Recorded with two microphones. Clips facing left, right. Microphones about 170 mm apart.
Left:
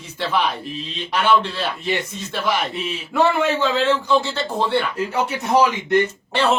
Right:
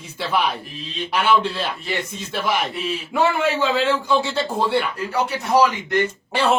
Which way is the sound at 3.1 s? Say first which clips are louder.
Left 2 dB; 10° right (ahead or behind).